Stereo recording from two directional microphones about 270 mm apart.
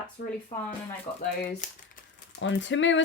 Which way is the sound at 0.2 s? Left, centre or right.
Left.